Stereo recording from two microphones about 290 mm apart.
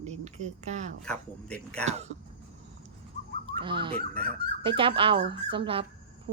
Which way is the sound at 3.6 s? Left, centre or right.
Centre.